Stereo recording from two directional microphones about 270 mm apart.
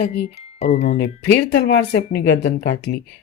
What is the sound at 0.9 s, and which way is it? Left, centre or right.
Speech, left.